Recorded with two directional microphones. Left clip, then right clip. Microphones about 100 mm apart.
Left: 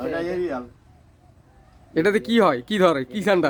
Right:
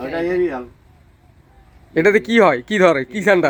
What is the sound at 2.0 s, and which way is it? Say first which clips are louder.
Speech: right 6 dB; 10° left (ahead or behind).